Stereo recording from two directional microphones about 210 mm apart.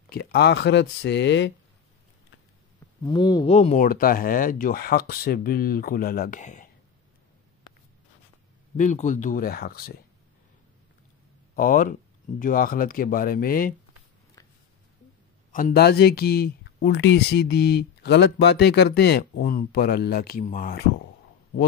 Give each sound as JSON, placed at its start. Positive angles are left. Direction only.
{"t": 0.1, "sound": "speech", "side_deg": 50}
{"t": 3.0, "sound": "speech", "side_deg": 20}
{"t": 3.5, "sound": "speech", "side_deg": 35}
{"t": 8.7, "sound": "speech", "side_deg": 35}
{"t": 11.5, "sound": "speech", "side_deg": 40}
{"t": 15.5, "sound": "speech", "side_deg": 45}